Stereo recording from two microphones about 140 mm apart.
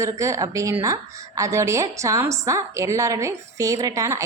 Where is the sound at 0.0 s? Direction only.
20° right (ahead or behind).